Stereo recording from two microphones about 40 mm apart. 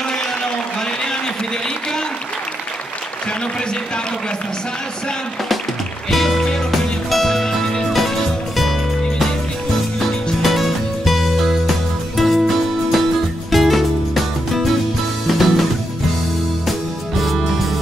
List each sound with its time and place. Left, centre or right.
0.1 s a sound: centre
6.0 s music: centre
10.4 s music: centre
17.2 s music: centre